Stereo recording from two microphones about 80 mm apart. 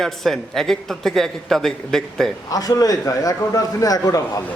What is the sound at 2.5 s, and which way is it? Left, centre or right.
A man's voice, left.